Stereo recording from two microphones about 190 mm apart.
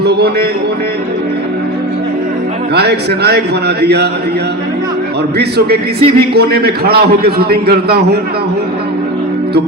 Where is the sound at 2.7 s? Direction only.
60° right (ahead or behind).